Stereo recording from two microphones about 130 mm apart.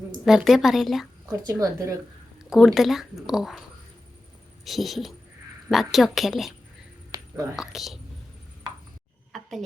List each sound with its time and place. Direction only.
0.3 s speech: centre (ahead or behind)
1.3 s a woman's voice: 25° right (ahead or behind)
2.4 s speech: centre (ahead or behind)
4.6 s speech: centre (ahead or behind)
7.1 s a sound: 30° right (ahead or behind)
7.5 s speech: 5° right (ahead or behind)
9.3 s a sound: centre (ahead or behind)